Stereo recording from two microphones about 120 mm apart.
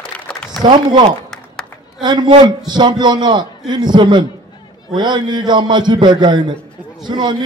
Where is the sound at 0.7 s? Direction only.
40° right (ahead or behind).